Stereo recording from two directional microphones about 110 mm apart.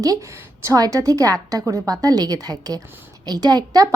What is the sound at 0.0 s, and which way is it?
A woman's voice, 30° right (ahead or behind).